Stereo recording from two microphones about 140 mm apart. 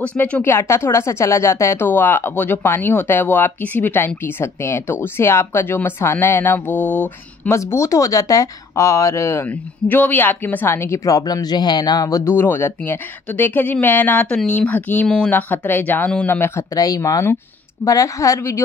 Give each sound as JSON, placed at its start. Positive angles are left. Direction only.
{"t": 0.0, "sound": "speech", "side_deg": 10}
{"t": 7.5, "sound": "speech", "side_deg": 20}
{"t": 12.3, "sound": "speech", "side_deg": 15}